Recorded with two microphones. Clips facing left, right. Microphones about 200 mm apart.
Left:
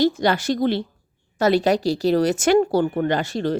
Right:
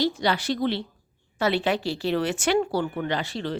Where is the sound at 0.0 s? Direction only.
45° left (ahead or behind).